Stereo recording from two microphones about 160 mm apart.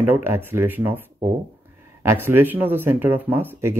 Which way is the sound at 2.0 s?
15° right (ahead or behind).